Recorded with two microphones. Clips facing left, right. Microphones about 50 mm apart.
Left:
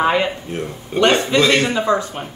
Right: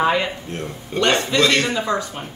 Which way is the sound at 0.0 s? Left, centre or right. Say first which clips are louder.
Left 2 dB; centre.